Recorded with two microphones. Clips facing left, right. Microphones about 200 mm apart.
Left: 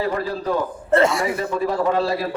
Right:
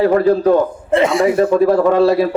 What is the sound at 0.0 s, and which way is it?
Speech, 60° right (ahead or behind).